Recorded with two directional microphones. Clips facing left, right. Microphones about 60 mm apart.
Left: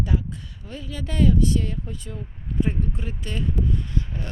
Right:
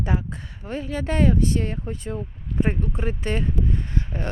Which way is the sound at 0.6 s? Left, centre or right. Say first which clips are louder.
Right 7 dB; right.